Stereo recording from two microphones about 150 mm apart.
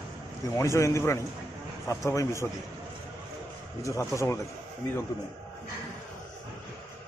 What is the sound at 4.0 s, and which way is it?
Speech, 20° left (ahead or behind).